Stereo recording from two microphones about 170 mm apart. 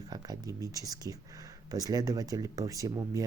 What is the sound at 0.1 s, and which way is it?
Speech, 20° right (ahead or behind).